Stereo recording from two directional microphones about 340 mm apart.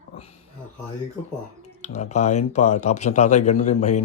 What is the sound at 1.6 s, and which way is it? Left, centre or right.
Speech, centre.